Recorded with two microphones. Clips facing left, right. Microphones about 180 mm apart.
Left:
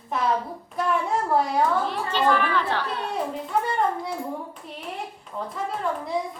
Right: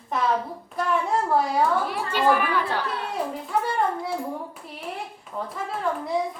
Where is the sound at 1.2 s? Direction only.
Centre (ahead or behind).